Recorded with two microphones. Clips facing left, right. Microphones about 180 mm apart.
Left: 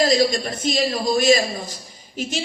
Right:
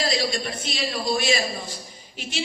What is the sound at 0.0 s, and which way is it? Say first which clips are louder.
A woman's voice: left 7 dB; 45° left (ahead or behind).